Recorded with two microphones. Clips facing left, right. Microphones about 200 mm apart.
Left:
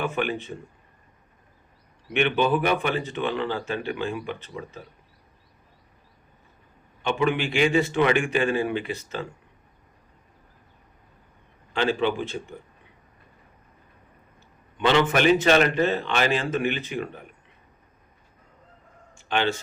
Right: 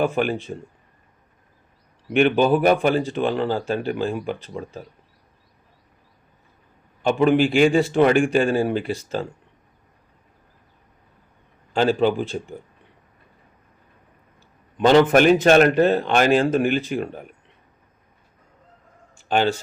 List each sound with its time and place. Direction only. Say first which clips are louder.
0.0 s speech: right 5 dB; 35° right (ahead or behind)
2.1 s speech: right 5 dB; 40° right (ahead or behind)
7.0 s speech: right 7 dB; 40° right (ahead or behind)
11.7 s a man's voice: right 5 dB; 40° right (ahead or behind)
14.8 s speech: right 7 dB; 40° right (ahead or behind)
19.1 s a sound: right 5 dB; 40° right (ahead or behind)